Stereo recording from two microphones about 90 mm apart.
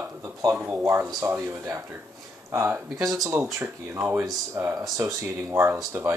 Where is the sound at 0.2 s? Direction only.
40° right (ahead or behind).